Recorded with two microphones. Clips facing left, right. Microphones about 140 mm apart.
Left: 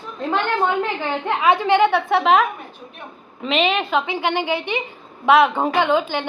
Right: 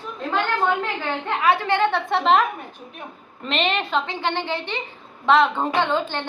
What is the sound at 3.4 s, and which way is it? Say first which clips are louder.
A woman's voice: left 4 dB; 5° left (ahead or behind).